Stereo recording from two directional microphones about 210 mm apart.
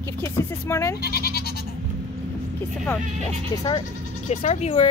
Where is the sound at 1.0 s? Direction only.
50° left (ahead or behind).